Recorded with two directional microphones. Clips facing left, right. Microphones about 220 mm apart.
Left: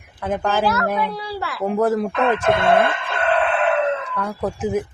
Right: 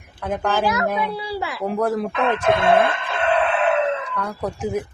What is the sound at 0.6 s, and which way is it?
Speech, 15° right (ahead or behind).